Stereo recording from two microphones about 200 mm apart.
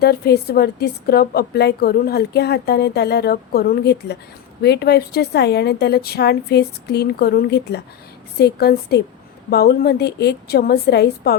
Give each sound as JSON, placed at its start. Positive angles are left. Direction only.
{"t": 0.0, "sound": "a woman's voice", "side_deg": 50}